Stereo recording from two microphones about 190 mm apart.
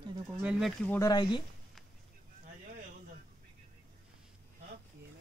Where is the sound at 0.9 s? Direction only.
20° left (ahead or behind).